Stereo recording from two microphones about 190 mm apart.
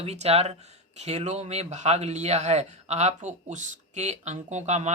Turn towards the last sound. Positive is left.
turn(degrees=-35)  # may be behind; listen again after turning